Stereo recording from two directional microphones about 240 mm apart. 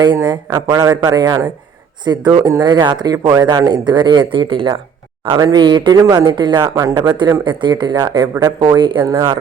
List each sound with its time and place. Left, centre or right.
0.0 s speech: centre